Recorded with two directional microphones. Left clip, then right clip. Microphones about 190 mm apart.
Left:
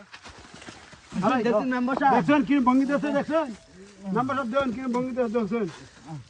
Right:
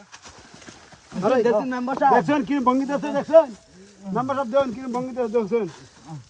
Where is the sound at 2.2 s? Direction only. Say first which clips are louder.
Right 1 dB; 50° right (ahead or behind); by 4.8 s 30° right (ahead or behind).